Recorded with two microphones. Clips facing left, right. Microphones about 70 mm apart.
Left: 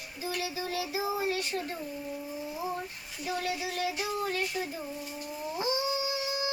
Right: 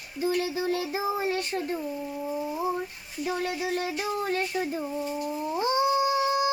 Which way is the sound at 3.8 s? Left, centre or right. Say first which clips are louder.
Right 2 dB; right.